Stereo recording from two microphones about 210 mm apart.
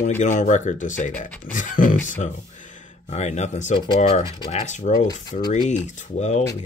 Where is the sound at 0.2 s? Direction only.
35° left (ahead or behind).